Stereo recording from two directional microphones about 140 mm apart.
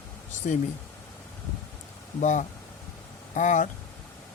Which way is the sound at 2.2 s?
60° left (ahead or behind).